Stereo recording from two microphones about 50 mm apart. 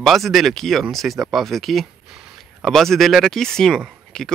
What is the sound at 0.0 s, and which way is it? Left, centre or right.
Speech, centre.